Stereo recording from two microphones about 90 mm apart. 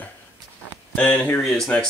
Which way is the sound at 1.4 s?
5° left (ahead or behind).